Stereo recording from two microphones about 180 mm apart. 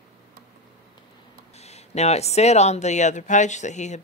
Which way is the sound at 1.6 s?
35° left (ahead or behind).